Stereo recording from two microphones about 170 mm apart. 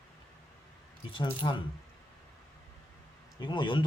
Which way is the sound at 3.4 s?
25° left (ahead or behind).